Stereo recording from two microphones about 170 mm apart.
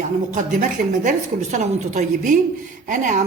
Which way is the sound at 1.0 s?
45° right (ahead or behind).